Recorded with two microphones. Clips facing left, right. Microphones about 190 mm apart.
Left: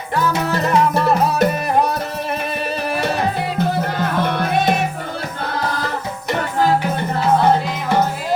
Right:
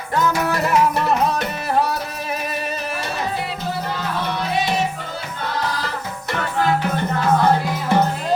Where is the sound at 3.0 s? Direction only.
60° left (ahead or behind).